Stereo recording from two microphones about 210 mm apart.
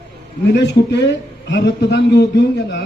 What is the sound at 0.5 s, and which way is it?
A man's voice, 55° left (ahead or behind).